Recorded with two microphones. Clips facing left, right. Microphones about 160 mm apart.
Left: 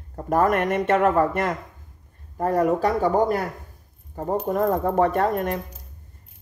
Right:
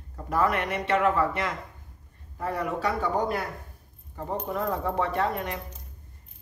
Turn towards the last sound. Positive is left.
turn(degrees=45)  # may be behind; listen again after turning